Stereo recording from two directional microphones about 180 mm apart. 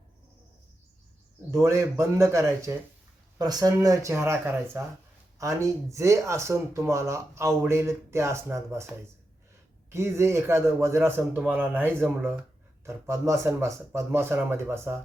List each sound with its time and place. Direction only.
1.6 s speech: 15° right (ahead or behind)
9.9 s speech: 15° right (ahead or behind)